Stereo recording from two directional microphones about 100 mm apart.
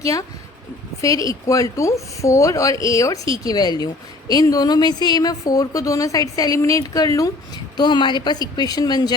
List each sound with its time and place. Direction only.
0.0 s a woman's voice: 35° left (ahead or behind)